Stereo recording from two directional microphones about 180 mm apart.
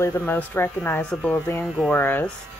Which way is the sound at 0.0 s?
15° left (ahead or behind).